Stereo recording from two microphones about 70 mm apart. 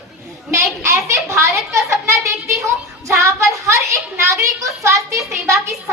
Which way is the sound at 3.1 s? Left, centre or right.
Right.